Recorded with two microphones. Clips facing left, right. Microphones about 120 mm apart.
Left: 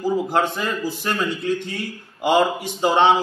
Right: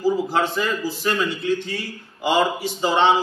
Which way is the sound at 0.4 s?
50° left (ahead or behind).